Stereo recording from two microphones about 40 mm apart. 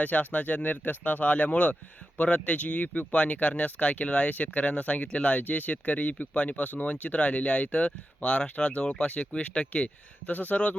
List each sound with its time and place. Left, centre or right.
0.0 s speech: left
4.3 s speech: left
5.4 s speech: left